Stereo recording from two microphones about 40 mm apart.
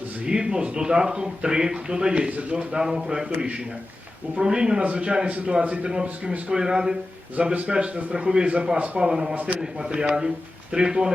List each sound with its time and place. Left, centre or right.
0.3 s a man's voice: centre
2.7 s a man's voice: centre
4.4 s speech: right
4.8 s a man's voice: right
6.5 s speech: right
9.3 s a man's voice: right
9.9 s speech: right